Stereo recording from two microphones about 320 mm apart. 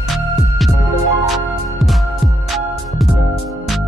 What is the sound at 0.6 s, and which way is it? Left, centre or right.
Music, centre.